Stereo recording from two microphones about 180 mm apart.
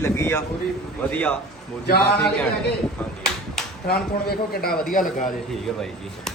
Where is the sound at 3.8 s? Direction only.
60° left (ahead or behind).